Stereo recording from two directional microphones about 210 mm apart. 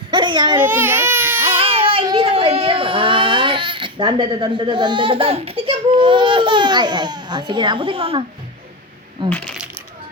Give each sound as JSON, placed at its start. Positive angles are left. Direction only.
{"t": 0.1, "sound": "a child's voice", "side_deg": -20}
{"t": 0.6, "sound": "speech", "side_deg": -10}
{"t": 1.5, "sound": "speech", "side_deg": -25}
{"t": 9.2, "sound": "speech", "side_deg": -25}